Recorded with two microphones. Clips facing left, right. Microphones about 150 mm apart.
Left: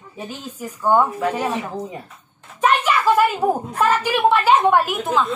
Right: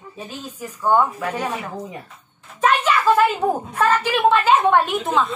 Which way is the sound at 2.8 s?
10° left (ahead or behind).